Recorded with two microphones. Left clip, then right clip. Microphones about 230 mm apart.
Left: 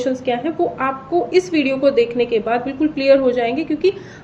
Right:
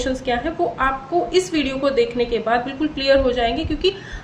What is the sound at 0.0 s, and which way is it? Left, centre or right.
A woman's voice, centre.